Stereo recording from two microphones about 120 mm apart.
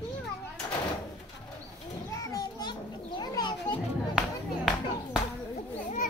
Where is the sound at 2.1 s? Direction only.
30° left (ahead or behind).